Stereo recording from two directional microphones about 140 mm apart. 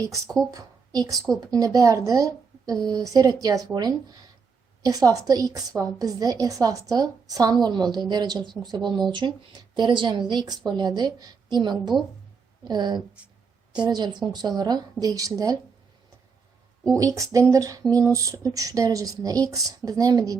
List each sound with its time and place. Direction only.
0.5 s a woman's voice: 25° right (ahead or behind)
16.9 s a woman's voice: 25° right (ahead or behind)